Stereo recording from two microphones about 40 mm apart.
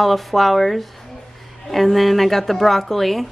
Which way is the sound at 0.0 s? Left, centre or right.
Centre.